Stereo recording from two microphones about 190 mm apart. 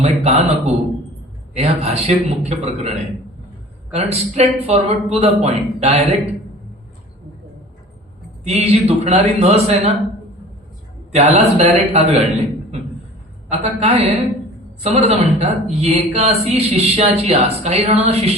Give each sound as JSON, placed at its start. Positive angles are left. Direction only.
{"t": 0.0, "sound": "speech", "side_deg": -35}
{"t": 8.4, "sound": "speech", "side_deg": -35}
{"t": 11.1, "sound": "speech", "side_deg": -35}
{"t": 13.5, "sound": "speech", "side_deg": -35}